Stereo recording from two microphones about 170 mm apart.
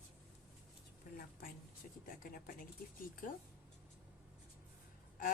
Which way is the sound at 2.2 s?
55° left (ahead or behind).